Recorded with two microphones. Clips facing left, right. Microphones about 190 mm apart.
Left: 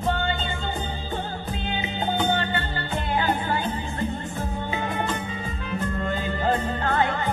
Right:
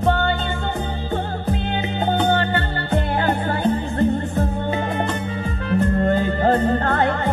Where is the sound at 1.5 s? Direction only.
60° right (ahead or behind).